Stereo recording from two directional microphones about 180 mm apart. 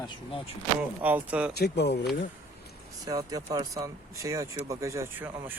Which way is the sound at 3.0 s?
20° right (ahead or behind).